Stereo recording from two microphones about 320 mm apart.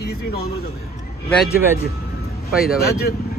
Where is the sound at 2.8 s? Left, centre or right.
Left.